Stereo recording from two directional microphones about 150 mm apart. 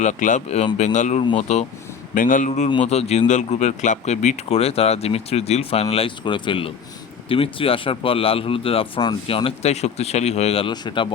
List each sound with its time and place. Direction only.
0.0 s a man's voice: 55° left (ahead or behind)
2.1 s a man's voice: 60° left (ahead or behind); by 10.7 s 45° left (ahead or behind)
10.7 s a man's voice: 30° left (ahead or behind)